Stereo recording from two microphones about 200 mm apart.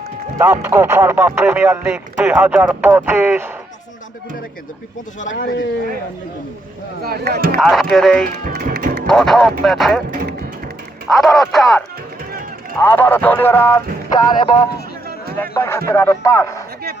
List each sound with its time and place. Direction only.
0.3 s speech: 10° right (ahead or behind)
5.2 s speech: 40° left (ahead or behind)
7.0 s speech: 50° right (ahead or behind)
7.6 s speech: centre (ahead or behind)
8.4 s speech: 50° right (ahead or behind)
8.8 s music: 45° right (ahead or behind)
9.0 s speech: centre (ahead or behind)
11.1 s speech: centre (ahead or behind)
12.8 s speech: 10° left (ahead or behind)